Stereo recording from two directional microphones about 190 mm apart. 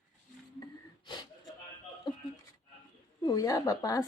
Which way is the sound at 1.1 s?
25° left (ahead or behind).